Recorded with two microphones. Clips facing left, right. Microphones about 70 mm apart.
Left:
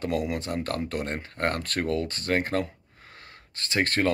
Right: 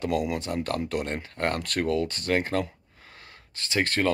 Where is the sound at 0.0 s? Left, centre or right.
Left.